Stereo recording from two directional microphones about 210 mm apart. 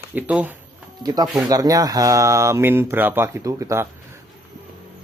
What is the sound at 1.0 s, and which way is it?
Speech, 20° right (ahead or behind).